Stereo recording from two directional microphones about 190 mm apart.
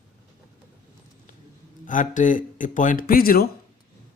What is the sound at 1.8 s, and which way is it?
Speech, 45° left (ahead or behind).